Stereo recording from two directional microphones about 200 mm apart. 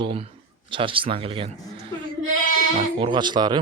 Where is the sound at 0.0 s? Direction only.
25° right (ahead or behind).